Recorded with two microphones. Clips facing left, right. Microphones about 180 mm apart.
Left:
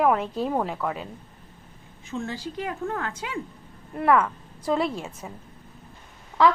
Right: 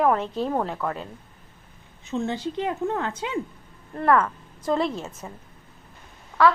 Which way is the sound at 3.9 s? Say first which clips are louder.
Even; 5° left (ahead or behind).